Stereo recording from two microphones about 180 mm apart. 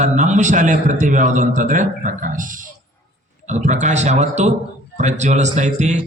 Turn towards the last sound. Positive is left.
turn(degrees=-40)  # may be behind; listen again after turning